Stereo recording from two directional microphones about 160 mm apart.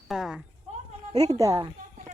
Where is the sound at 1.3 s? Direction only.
20° right (ahead or behind).